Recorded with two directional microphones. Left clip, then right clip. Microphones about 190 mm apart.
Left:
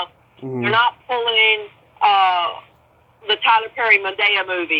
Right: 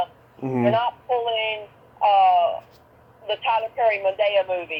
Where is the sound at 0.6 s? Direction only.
25° left (ahead or behind).